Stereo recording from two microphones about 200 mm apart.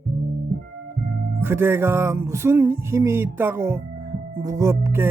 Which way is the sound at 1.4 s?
10° right (ahead or behind).